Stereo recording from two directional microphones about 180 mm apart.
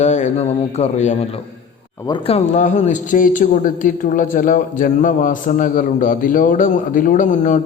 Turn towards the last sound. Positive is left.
turn(degrees=45)  # may be behind; listen again after turning